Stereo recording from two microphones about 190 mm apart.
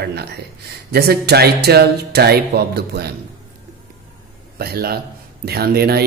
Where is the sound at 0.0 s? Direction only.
55° right (ahead or behind).